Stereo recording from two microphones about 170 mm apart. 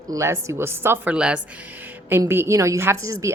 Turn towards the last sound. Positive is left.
turn(degrees=-15)  # may be behind; listen again after turning